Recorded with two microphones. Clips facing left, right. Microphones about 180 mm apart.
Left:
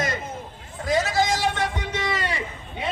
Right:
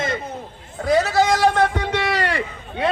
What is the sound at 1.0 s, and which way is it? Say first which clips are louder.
Vehicle: right 4 dB; 65° right (ahead or behind).